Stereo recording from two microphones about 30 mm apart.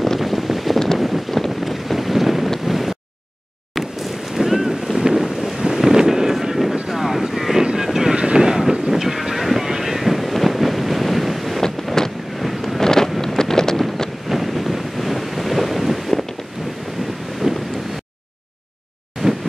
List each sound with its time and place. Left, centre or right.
0.2 s boat: centre
0.9 s wind noise: centre
1.6 s boat: centre
2.6 s wind noise: centre
4.4 s boat: centre
4.9 s wind noise: centre
7.7 s boat: centre
8.4 s wind noise: centre
11.6 s vehicle: centre
12.4 s wind noise: centre
12.8 s wind noise: centre
14.3 s wind noise: centre
17.4 s wind noise: centre